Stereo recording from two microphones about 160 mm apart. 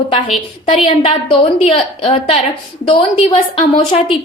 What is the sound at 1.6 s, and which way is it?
A woman's voice, 35° left (ahead or behind).